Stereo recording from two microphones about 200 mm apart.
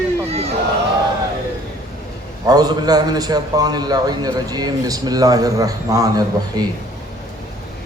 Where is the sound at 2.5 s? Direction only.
20° right (ahead or behind).